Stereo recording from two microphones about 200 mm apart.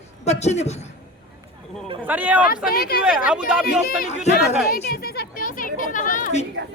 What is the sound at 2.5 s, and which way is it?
Speech, 50° left (ahead or behind).